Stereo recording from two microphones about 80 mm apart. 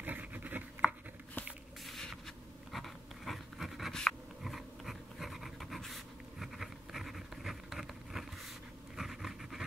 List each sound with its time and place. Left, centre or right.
0.0 s writing: right
1.9 s a sound: centre
6.4 s insect: centre
8.9 s writing: centre